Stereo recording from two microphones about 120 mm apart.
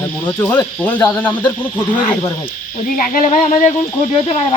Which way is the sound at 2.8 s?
90° left.